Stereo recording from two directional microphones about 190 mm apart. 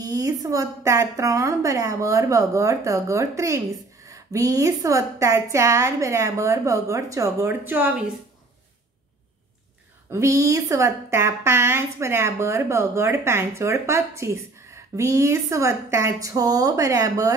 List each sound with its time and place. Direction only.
0.0 s a woman's voice: 20° right (ahead or behind)
10.0 s a woman's voice: 15° right (ahead or behind)